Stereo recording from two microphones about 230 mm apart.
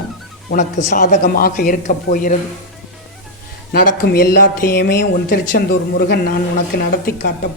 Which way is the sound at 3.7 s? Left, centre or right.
Left.